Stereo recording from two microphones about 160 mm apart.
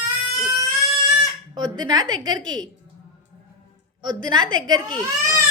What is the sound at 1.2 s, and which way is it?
Speech, 25° right (ahead or behind).